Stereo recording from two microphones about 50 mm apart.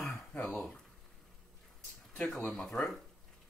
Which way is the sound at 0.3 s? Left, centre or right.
Centre.